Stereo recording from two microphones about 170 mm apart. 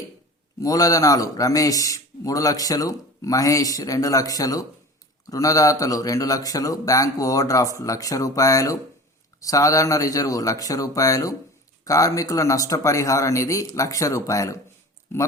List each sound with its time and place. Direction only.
0.6 s a man's voice: 20° left (ahead or behind)